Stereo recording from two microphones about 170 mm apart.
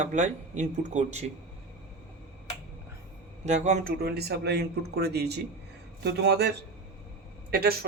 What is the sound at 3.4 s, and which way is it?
Speech, 45° right (ahead or behind).